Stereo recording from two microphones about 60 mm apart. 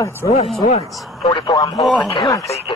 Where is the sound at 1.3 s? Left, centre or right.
Left.